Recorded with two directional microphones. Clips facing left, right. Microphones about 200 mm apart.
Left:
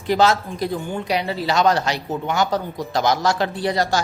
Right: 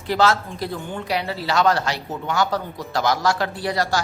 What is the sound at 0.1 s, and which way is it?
Speech, 15° left (ahead or behind).